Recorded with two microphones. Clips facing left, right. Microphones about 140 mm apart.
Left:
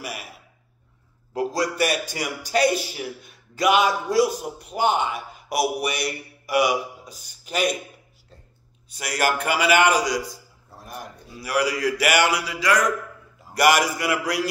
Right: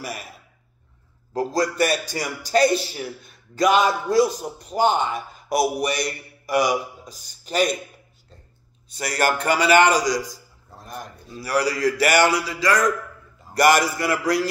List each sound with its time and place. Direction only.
1.5 s a man's voice: 10° left (ahead or behind)
6.0 s a sound: 10° left (ahead or behind)
6.7 s a man's voice: 35° right (ahead or behind)
8.9 s a man's voice: 10° left (ahead or behind)
12.1 s a man's voice: 35° right (ahead or behind)
13.5 s a man's voice: 10° left (ahead or behind)